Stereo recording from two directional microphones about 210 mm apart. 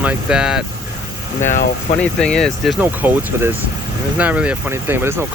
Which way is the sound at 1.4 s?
35° left (ahead or behind).